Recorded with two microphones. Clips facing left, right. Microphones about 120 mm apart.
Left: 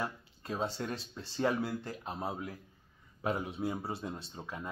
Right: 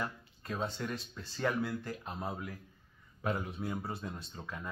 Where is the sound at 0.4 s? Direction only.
30° left (ahead or behind).